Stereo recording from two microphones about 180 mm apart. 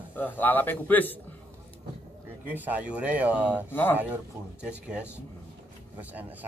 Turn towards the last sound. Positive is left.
turn(degrees=-10)  # may be behind; listen again after turning